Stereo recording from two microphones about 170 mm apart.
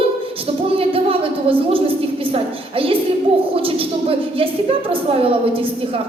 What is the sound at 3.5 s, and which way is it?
A woman's voice, 35° right (ahead or behind).